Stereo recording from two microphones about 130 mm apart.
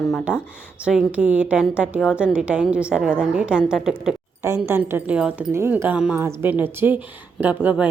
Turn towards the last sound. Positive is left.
turn(degrees=-10)  # may be behind; listen again after turning